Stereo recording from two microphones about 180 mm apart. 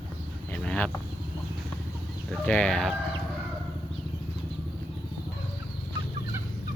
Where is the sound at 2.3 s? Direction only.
5° left (ahead or behind).